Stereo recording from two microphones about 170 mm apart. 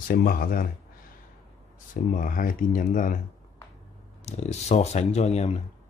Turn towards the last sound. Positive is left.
turn(degrees=40)  # may be behind; listen again after turning